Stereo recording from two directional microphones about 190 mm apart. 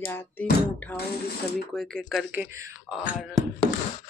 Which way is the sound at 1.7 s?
5° left (ahead or behind).